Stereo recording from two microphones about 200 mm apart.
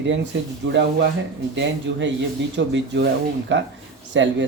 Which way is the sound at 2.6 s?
60° right (ahead or behind).